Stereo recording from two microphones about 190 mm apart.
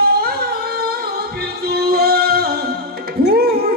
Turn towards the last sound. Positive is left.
turn(degrees=-55)  # may be behind; listen again after turning